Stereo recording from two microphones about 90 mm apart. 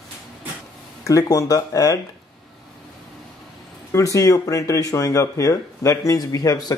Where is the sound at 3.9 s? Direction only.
40° left (ahead or behind).